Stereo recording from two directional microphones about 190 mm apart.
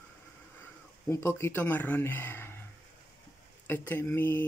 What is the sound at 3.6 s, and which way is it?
Speech, 10° left (ahead or behind).